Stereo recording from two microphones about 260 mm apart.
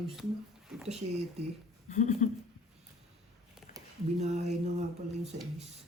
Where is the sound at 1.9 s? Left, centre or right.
Left.